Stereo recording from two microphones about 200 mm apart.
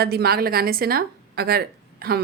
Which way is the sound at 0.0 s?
50° right (ahead or behind).